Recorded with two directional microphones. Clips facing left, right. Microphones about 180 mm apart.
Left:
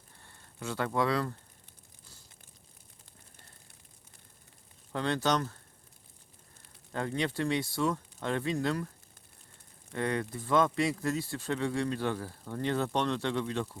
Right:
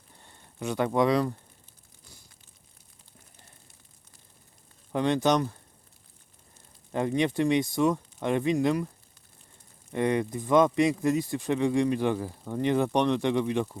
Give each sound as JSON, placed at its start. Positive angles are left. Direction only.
{"t": 0.2, "sound": "speech", "side_deg": -20}
{"t": 4.9, "sound": "speech", "side_deg": -20}
{"t": 6.9, "sound": "speech", "side_deg": -20}
{"t": 9.9, "sound": "speech", "side_deg": -20}